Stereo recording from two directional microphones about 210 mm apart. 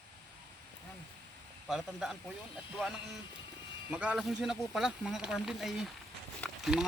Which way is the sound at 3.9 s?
5° right (ahead or behind).